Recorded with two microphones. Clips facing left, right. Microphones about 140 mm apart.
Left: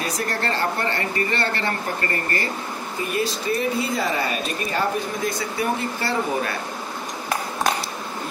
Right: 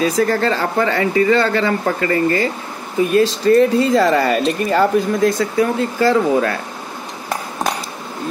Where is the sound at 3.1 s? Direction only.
90° right.